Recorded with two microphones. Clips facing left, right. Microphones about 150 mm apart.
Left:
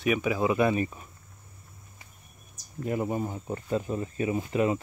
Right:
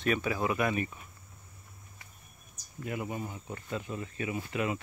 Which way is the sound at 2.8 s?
40° left (ahead or behind).